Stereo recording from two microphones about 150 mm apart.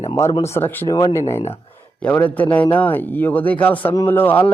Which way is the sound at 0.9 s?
25° left (ahead or behind).